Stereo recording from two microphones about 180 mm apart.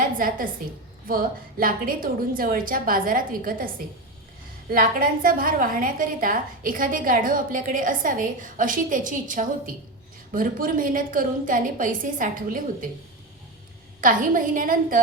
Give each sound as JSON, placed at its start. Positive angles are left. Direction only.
{"t": 0.0, "sound": "a woman's voice", "side_deg": -50}
{"t": 4.7, "sound": "a woman's voice", "side_deg": -50}
{"t": 14.0, "sound": "a woman's voice", "side_deg": -50}